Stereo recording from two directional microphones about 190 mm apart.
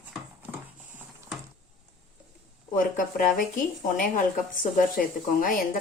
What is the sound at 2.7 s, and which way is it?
Speech, 45° left (ahead or behind).